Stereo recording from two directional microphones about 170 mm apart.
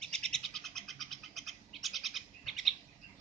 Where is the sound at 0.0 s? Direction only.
5° left (ahead or behind).